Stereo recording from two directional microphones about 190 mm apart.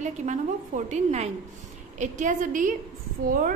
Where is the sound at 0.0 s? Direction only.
40° right (ahead or behind).